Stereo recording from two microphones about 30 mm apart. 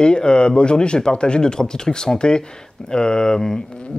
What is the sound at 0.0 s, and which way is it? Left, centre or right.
Speech, left.